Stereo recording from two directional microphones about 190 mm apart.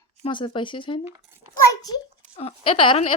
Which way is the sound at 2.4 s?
30° left (ahead or behind).